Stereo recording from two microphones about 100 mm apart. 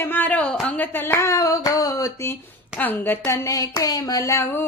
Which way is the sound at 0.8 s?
20° left (ahead or behind).